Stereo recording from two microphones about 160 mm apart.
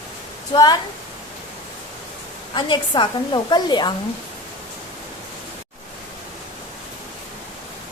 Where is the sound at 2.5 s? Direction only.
30° left (ahead or behind).